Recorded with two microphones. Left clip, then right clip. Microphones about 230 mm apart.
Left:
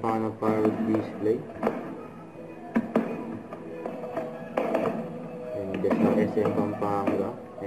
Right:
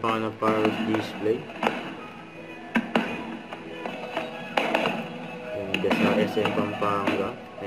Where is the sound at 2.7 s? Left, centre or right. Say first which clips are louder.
Right 2 dB; right.